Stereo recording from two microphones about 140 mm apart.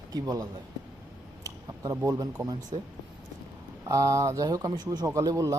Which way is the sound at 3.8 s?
25° right (ahead or behind).